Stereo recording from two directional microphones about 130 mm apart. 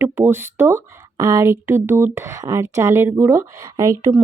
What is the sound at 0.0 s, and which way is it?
Speech, 15° right (ahead or behind).